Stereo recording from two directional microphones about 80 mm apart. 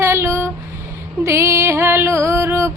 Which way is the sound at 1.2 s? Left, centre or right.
Right.